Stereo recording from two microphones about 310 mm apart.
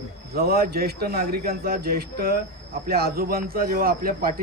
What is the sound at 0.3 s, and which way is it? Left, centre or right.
A man's voice, right.